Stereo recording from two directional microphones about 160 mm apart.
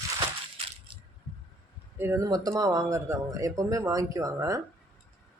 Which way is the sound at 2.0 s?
15° right (ahead or behind).